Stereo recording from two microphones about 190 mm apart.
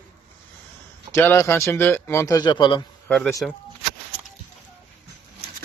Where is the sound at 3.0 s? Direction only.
5° left (ahead or behind).